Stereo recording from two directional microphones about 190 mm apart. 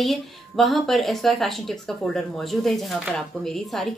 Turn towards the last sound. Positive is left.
turn(degrees=0)  # may be behind; listen again after turning